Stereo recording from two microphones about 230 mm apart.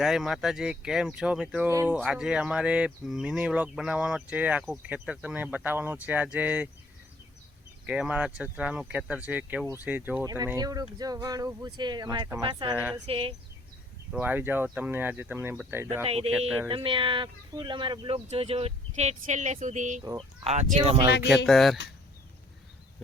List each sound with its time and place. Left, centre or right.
0.0 s speech: centre
7.9 s speech: centre; by 12.7 s right
12.7 s speech: centre
13.1 s speech: right
14.1 s speech: centre
16.0 s speech: right
21.4 s speech: centre